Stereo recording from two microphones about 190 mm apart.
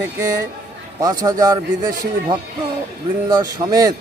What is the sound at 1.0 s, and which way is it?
Speech, 20° right (ahead or behind).